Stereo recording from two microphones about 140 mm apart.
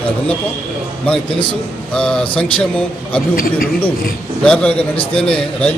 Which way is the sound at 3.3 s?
90° left.